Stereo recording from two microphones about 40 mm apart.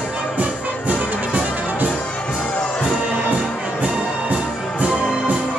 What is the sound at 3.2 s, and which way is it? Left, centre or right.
Music, right.